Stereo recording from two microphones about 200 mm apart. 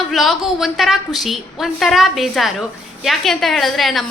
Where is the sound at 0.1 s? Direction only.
Centre (ahead or behind).